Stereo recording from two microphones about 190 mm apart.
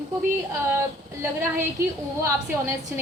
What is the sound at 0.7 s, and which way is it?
A woman's voice, 10° right (ahead or behind).